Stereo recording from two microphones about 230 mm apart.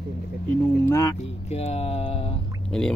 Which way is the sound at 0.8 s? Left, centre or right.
Centre.